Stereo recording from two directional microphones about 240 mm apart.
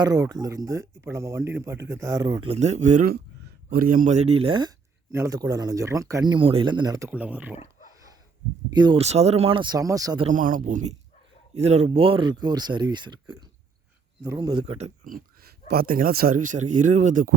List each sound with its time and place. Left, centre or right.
0.0 s speech: centre
7.1 s speech: centre
8.7 s speech: centre
10.2 s speech: right